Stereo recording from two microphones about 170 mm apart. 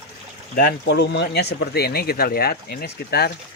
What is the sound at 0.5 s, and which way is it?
Speech, 70° left (ahead or behind).